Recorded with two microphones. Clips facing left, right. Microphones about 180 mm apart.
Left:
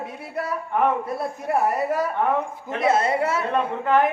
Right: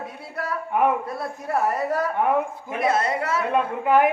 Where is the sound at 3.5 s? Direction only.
10° right (ahead or behind).